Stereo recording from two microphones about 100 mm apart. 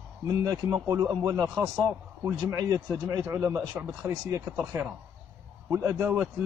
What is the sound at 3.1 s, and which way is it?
A man's voice, 25° right (ahead or behind).